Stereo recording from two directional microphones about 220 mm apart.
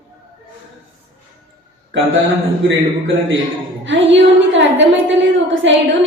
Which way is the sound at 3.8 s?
55° right (ahead or behind).